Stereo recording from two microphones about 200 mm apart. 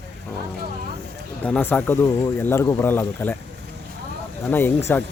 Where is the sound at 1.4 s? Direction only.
10° left (ahead or behind).